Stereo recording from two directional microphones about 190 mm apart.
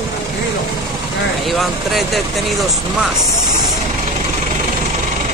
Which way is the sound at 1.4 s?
Centre (ahead or behind).